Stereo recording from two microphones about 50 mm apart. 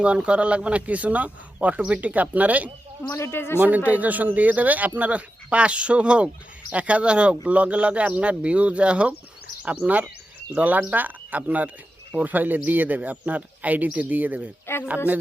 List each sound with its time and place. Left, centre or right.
0.0 s speech: right
3.0 s speech: left
3.8 s speech: right